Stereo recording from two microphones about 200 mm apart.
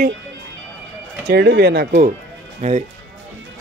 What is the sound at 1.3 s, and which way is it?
Speech, 55° right (ahead or behind).